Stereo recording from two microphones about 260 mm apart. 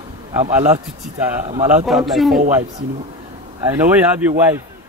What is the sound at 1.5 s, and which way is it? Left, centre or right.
Speech, right.